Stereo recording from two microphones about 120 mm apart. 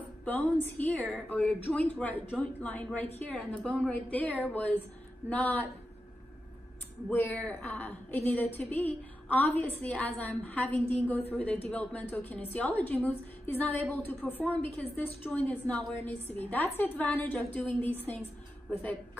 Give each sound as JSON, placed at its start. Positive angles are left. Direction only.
{"t": 0.7, "sound": "a woman's voice", "side_deg": 15}
{"t": 7.1, "sound": "a woman's voice", "side_deg": 15}